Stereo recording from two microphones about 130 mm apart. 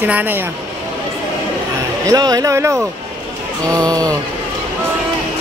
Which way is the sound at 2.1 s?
30° right (ahead or behind).